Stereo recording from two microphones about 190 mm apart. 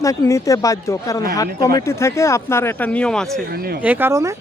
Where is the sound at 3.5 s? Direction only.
55° right (ahead or behind).